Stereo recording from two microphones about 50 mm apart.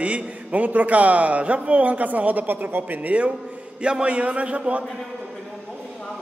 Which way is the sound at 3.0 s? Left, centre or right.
Right.